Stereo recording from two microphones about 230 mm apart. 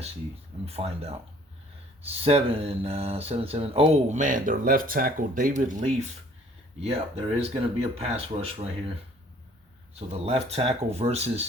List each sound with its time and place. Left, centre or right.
0.6 s speech: right
9.9 s speech: right